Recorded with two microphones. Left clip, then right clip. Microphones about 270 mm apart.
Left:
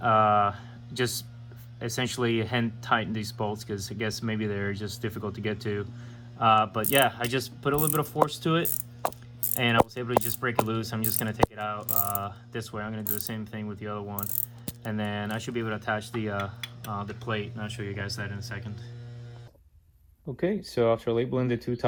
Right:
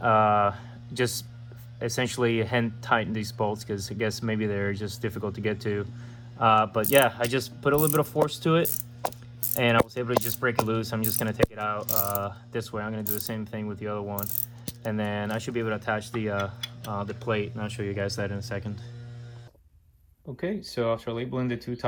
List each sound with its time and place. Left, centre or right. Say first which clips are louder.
0.0 s speech: right 1 dB; centre
5.1 s speech: right 3 dB; centre
20.6 s speech: left 3 dB; left